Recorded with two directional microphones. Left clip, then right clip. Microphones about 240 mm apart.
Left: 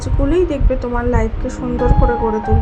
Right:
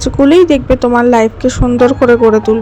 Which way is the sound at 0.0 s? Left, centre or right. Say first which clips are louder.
Right 10 dB; right.